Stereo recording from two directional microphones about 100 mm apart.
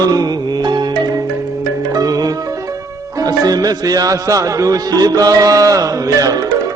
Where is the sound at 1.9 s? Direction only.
40° right (ahead or behind).